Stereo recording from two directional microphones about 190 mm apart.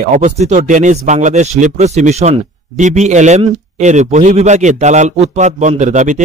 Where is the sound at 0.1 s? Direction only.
40° right (ahead or behind).